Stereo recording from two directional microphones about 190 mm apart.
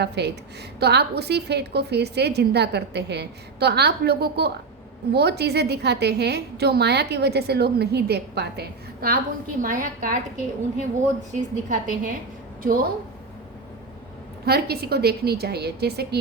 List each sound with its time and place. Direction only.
0.0 s a woman's voice: 60° right (ahead or behind); by 12.1 s 40° right (ahead or behind)
14.4 s a woman's voice: 55° right (ahead or behind)